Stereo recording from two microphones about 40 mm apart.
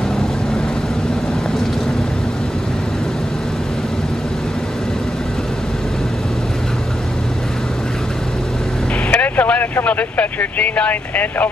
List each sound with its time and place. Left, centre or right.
9.1 s speech: left